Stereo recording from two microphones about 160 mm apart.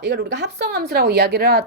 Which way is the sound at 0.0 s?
90° right.